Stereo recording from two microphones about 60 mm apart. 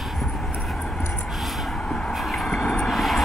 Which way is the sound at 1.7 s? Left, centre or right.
Centre.